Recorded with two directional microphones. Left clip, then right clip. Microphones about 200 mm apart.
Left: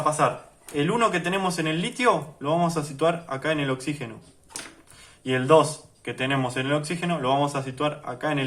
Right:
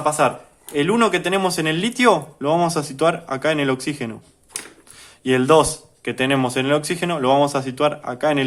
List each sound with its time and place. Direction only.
0.2 s speech: 50° right (ahead or behind)
5.2 s speech: 50° right (ahead or behind)